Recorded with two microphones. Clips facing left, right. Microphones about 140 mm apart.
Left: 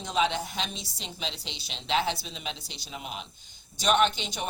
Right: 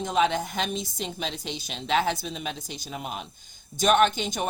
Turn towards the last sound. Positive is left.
turn(degrees=-45)  # may be behind; listen again after turning